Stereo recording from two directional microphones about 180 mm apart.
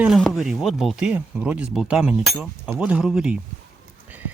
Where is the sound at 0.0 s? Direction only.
Centre (ahead or behind).